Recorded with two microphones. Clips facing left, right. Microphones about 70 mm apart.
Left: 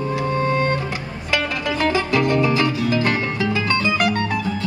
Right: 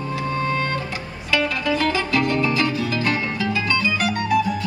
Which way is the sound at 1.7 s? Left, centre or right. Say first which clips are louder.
Left 3 dB; left.